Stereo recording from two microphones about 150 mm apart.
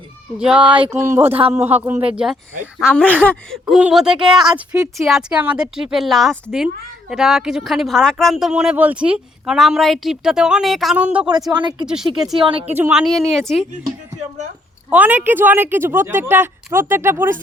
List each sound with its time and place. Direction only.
0.3 s speech: 5° right (ahead or behind)
1.3 s a man's voice: 40° right (ahead or behind)
1.6 s speech: 15° right (ahead or behind)
2.1 s speech: 5° right (ahead or behind)
2.9 s speech: 10° left (ahead or behind); by 11.3 s 10° right (ahead or behind)
11.5 s speech: 30° right (ahead or behind)
11.9 s speech: 5° right (ahead or behind)
12.4 s a man's voice: 35° right (ahead or behind)
12.9 s speech: centre (ahead or behind)
14.8 s speech: 10° right (ahead or behind)